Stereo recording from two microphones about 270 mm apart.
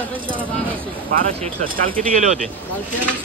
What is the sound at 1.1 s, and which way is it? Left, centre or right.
Speech, right.